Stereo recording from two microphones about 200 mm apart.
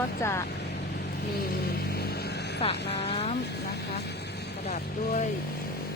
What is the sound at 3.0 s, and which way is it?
Speech, 30° left (ahead or behind).